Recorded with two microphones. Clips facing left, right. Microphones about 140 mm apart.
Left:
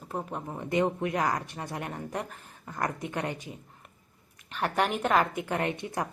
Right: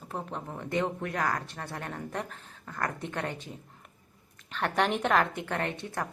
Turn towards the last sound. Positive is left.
turn(degrees=15)  # may be behind; listen again after turning